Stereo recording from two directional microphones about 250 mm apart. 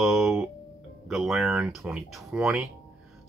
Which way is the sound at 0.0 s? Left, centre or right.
Centre.